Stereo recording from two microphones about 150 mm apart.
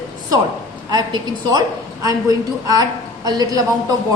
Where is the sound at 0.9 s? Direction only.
25° right (ahead or behind).